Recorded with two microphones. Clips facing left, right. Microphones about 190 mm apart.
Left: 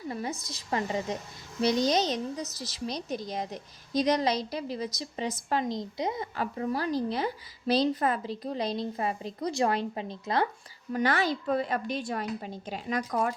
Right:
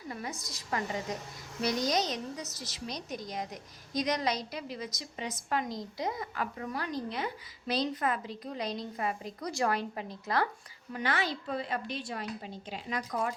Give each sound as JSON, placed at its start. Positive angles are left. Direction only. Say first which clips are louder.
{"t": 0.1, "sound": "a woman's voice", "louder": "left 4 dB", "side_deg": 30}
{"t": 10.9, "sound": "a woman's voice", "louder": "left 6 dB", "side_deg": 40}